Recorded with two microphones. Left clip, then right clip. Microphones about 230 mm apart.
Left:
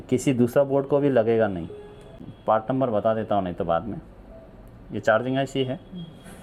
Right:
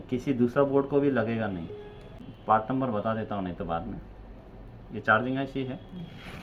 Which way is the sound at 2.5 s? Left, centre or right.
Left.